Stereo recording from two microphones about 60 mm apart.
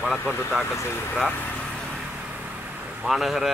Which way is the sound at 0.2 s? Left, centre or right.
Left.